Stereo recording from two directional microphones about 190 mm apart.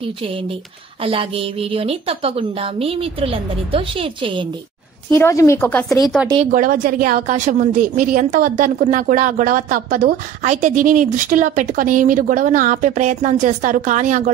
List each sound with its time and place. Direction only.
0.0 s a woman's voice: 30° right (ahead or behind)
5.1 s speech: 15° left (ahead or behind)
6.5 s a woman's voice: 45° right (ahead or behind)